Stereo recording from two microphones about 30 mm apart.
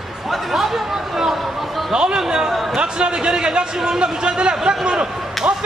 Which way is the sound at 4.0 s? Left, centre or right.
Right.